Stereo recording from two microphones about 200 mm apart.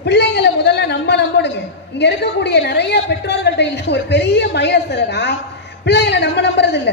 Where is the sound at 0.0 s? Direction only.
60° left (ahead or behind).